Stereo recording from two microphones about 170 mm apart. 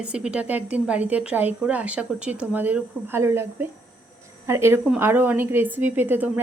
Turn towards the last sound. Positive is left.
turn(degrees=-10)  # may be behind; listen again after turning